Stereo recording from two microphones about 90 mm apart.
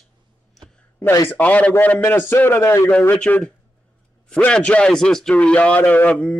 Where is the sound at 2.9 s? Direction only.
15° left (ahead or behind).